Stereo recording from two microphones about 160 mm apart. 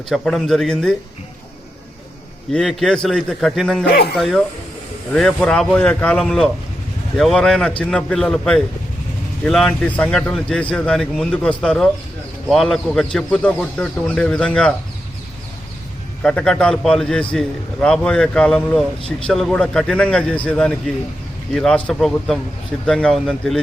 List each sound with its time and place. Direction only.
0.1 s a man's voice: centre (ahead or behind)
2.5 s a man's voice: centre (ahead or behind)
3.8 s speech: 80° left
4.1 s a man's voice: centre (ahead or behind)
16.2 s a man's voice: 5° left (ahead or behind)